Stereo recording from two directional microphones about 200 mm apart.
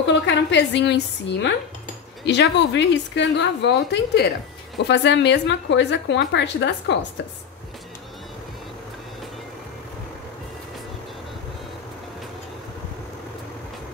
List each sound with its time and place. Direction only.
0.0 s a woman's voice: 60° left (ahead or behind)